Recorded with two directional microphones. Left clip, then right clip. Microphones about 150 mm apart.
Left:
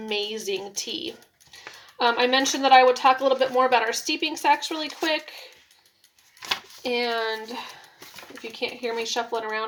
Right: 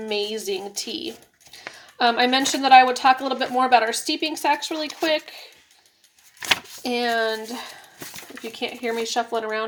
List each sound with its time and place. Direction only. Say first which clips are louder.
0.1 s speech: right 1 dB; 25° right (ahead or behind)
6.8 s speech: right 3 dB; 25° right (ahead or behind)